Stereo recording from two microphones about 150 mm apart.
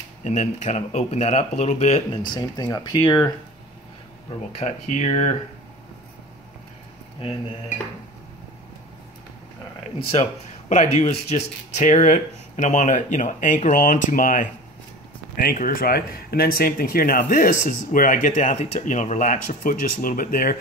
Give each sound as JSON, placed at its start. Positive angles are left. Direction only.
{"t": 0.2, "sound": "speech", "side_deg": 55}
{"t": 2.2, "sound": "speech", "side_deg": 30}
{"t": 4.3, "sound": "speech", "side_deg": 45}
{"t": 7.2, "sound": "dishes", "side_deg": 40}
{"t": 10.7, "sound": "speech", "side_deg": 50}
{"t": 15.3, "sound": "speech", "side_deg": 70}